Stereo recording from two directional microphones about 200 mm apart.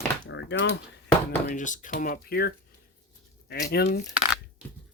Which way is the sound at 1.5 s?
40° left (ahead or behind).